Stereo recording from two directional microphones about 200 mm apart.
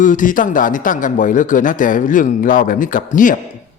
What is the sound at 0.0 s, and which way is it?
A man's voice, 40° left (ahead or behind).